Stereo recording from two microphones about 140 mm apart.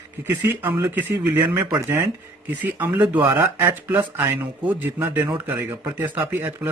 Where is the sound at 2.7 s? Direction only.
10° right (ahead or behind).